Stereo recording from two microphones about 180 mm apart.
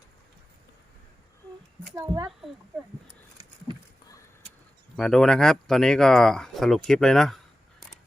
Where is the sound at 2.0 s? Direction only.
20° right (ahead or behind).